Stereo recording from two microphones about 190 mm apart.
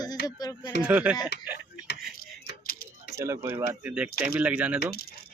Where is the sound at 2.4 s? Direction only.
55° left (ahead or behind).